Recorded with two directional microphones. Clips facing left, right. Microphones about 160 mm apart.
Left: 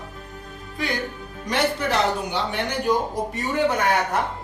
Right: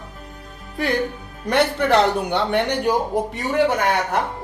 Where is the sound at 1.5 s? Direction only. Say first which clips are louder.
Right 5 dB; 60° right (ahead or behind).